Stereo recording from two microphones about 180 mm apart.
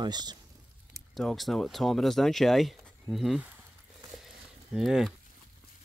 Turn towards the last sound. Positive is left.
turn(degrees=0)  # may be behind; listen again after turning